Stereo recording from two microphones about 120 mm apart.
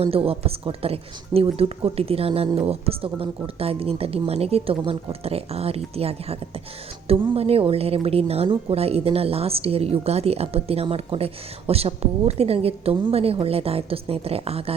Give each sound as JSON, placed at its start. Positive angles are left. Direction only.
{"t": 0.3, "sound": "a woman's voice", "side_deg": -55}